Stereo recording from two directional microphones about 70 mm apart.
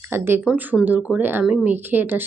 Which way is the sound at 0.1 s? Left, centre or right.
Right.